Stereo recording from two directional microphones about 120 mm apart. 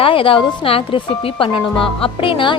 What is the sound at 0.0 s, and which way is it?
Speech, 50° left (ahead or behind).